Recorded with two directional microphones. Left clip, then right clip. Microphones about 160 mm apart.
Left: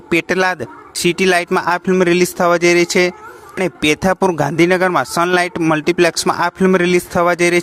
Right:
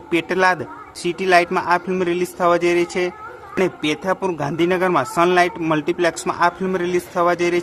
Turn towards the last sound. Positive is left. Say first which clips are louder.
# left 4 dB
turn(degrees=40)  # may be behind; listen again after turning